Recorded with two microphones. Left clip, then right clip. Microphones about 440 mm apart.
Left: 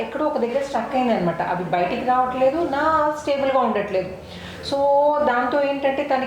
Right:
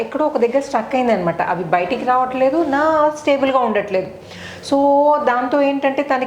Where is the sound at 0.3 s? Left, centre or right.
Right.